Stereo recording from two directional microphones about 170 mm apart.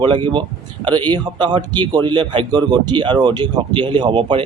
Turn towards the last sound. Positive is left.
turn(degrees=-25)  # may be behind; listen again after turning